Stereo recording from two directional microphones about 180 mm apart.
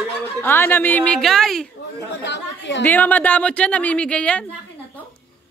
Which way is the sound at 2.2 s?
75° left (ahead or behind).